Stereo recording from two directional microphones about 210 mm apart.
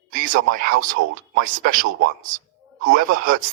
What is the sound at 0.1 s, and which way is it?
A man's voice, 40° right (ahead or behind).